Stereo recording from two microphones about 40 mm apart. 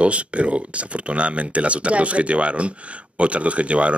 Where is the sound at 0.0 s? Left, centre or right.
Right.